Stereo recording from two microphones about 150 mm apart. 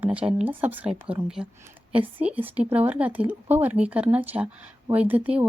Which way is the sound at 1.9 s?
35° right (ahead or behind).